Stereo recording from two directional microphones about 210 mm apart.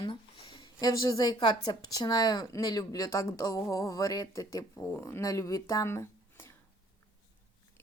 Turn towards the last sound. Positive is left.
turn(degrees=10)  # may be behind; listen again after turning